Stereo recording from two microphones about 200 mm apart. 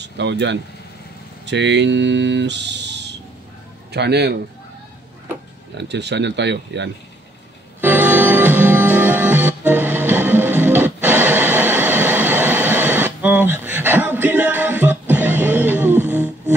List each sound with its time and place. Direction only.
0.0 s speech: 60° right (ahead or behind)
5.8 s speech: 60° right (ahead or behind)
7.8 s music: 10° right (ahead or behind)